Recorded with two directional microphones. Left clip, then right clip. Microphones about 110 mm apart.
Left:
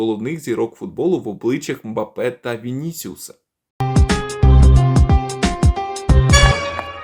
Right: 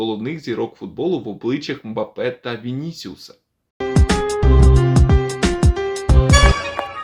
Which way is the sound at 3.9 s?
Centre (ahead or behind).